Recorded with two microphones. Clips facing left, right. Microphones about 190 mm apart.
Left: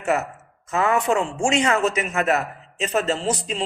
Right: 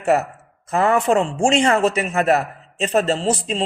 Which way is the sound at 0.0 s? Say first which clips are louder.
Right 5 dB; 35° right (ahead or behind).